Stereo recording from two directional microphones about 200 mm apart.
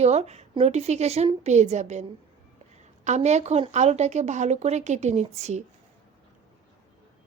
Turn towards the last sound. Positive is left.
turn(degrees=-35)  # may be behind; listen again after turning